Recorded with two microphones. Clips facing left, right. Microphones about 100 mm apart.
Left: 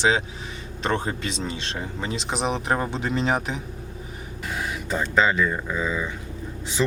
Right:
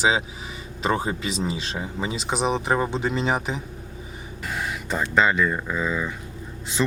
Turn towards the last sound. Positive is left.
turn(degrees=-5)  # may be behind; listen again after turning